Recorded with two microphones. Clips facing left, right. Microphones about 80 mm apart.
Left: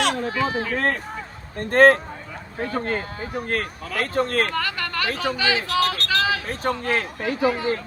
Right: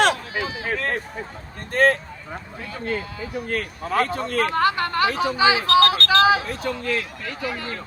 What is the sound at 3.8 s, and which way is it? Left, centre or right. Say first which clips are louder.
Speech: right 5 dB; right.